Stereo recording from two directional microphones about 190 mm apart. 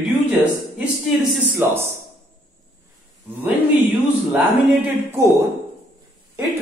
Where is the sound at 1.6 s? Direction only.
10° right (ahead or behind).